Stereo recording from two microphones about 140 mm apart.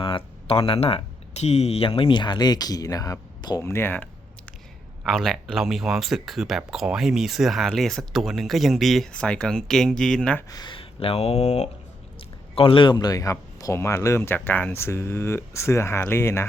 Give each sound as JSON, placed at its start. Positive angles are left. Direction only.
{"t": 0.0, "sound": "speech", "side_deg": 40}
{"t": 5.0, "sound": "speech", "side_deg": 0}
{"t": 10.5, "sound": "speech", "side_deg": 35}
{"t": 12.5, "sound": "speech", "side_deg": 35}